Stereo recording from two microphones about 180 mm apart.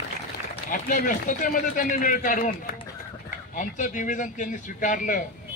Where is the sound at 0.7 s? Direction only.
50° left (ahead or behind).